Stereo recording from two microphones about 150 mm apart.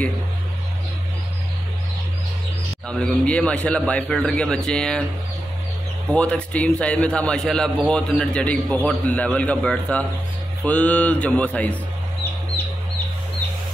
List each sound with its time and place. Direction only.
2.9 s a man's voice: 5° left (ahead or behind)
6.1 s a man's voice: 5° left (ahead or behind)